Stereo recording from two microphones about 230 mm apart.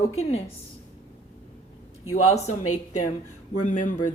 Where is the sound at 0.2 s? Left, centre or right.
Left.